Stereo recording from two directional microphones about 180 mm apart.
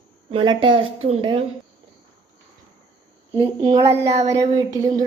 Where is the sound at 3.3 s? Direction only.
25° right (ahead or behind).